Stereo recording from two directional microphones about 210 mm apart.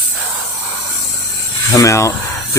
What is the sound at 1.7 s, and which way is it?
Speech, 15° left (ahead or behind).